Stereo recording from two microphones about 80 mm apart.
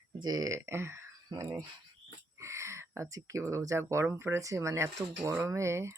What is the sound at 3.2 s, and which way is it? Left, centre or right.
Speech, right.